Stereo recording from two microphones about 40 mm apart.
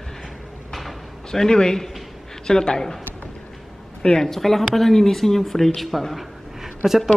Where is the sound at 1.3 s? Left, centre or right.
Centre.